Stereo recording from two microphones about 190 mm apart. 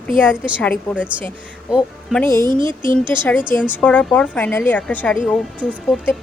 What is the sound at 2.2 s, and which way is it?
Speech, 15° left (ahead or behind).